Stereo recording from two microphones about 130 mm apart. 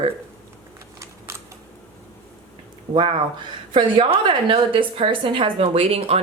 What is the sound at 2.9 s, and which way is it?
A woman's voice, 40° right (ahead or behind).